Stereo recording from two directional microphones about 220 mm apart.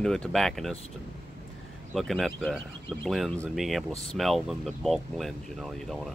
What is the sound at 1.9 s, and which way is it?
Speech, centre (ahead or behind).